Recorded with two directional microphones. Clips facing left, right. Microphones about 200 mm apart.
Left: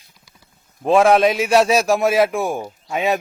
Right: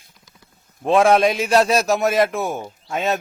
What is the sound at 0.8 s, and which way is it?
A man's voice, centre (ahead or behind).